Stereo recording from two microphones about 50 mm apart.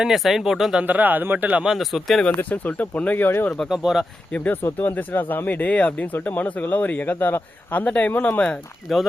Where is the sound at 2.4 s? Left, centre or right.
Left.